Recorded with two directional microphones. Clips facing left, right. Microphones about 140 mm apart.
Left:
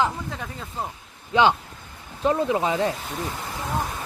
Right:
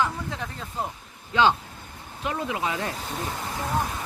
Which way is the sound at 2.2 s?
35° left (ahead or behind).